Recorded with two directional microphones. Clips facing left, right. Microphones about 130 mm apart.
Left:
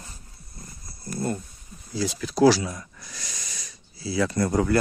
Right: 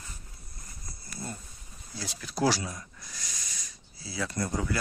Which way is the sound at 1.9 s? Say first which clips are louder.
Left 11 dB; 90° left.